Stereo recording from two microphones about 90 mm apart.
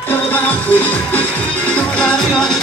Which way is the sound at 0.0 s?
20° left (ahead or behind).